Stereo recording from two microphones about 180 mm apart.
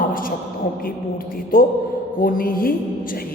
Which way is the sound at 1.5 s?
55° left (ahead or behind).